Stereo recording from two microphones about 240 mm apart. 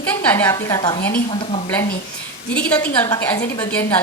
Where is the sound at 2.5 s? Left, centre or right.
Centre.